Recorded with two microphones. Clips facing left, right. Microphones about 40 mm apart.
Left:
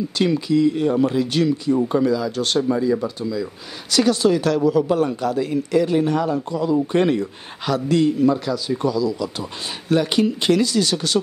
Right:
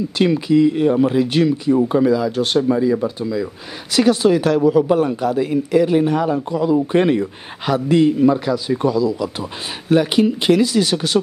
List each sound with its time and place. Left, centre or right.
0.2 s a man's voice: right